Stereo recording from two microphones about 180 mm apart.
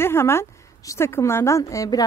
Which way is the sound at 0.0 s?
15° left (ahead or behind).